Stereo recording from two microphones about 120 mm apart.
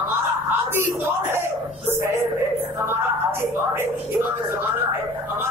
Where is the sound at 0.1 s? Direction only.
20° right (ahead or behind).